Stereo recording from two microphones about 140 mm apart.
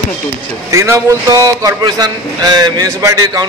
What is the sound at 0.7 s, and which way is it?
A man's voice, 20° right (ahead or behind).